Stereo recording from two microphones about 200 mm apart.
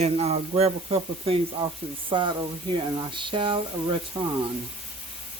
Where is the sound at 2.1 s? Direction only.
25° right (ahead or behind).